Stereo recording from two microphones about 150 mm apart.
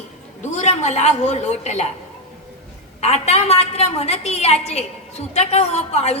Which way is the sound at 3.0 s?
45° left (ahead or behind).